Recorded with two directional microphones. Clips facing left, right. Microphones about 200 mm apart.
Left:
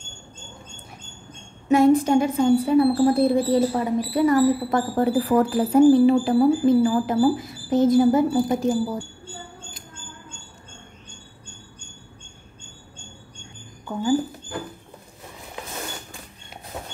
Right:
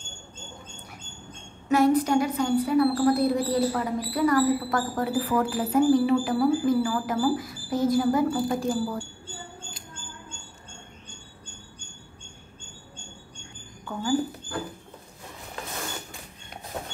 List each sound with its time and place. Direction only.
1.7 s a woman's voice: 25° left (ahead or behind)